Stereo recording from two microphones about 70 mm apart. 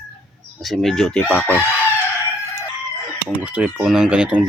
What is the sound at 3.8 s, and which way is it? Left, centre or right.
Speech, centre.